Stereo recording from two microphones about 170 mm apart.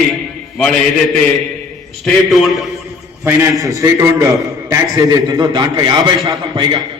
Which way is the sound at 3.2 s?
15° right (ahead or behind).